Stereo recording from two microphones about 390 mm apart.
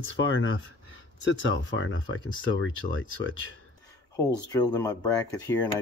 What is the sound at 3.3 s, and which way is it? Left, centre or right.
Speech, left.